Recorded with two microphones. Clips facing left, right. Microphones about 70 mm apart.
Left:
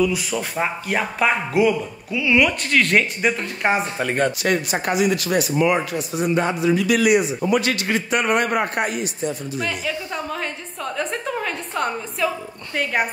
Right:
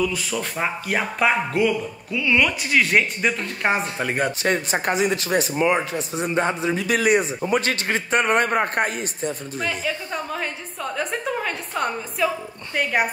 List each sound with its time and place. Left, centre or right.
0.0 s speech: centre
0.8 s a woman's voice: centre
4.4 s speech: right
9.6 s a woman's voice: centre